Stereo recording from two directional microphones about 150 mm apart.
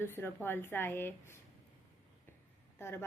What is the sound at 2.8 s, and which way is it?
Speech, 15° left (ahead or behind).